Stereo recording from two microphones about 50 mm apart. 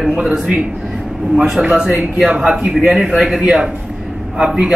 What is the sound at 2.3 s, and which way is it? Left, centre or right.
Speech, right.